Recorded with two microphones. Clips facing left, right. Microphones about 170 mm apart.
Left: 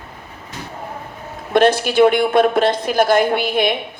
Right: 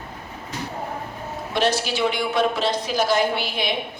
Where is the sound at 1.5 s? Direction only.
50° left (ahead or behind).